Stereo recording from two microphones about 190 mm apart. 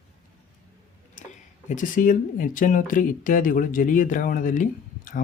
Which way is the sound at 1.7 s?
45° left (ahead or behind).